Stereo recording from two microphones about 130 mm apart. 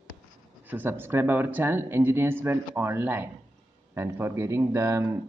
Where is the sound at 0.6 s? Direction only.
15° right (ahead or behind).